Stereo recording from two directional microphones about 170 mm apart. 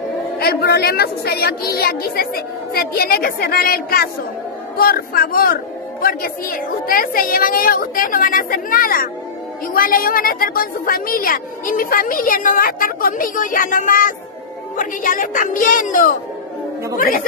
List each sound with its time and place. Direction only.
0.4 s a woman's voice: 65° left (ahead or behind); by 16.2 s 50° left (ahead or behind)